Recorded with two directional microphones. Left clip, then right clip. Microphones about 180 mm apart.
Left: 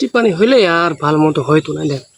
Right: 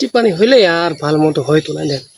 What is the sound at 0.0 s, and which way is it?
Speech, 10° left (ahead or behind).